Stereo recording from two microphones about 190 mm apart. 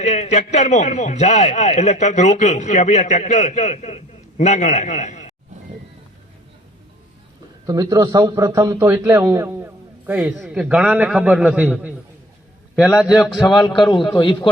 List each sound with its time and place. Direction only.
0.0 s a man's voice: 35° left (ahead or behind)
7.7 s a man's voice: 20° right (ahead or behind)
13.0 s a man's voice: centre (ahead or behind)
13.9 s a man's voice: 25° left (ahead or behind)